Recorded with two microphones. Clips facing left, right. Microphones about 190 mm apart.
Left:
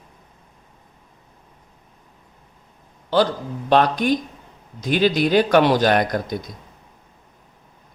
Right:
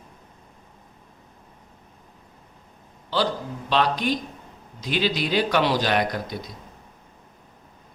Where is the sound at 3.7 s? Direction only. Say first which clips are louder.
Left 6 dB; 50° left (ahead or behind).